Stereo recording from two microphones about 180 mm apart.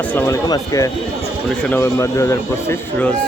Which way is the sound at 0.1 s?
10° left (ahead or behind).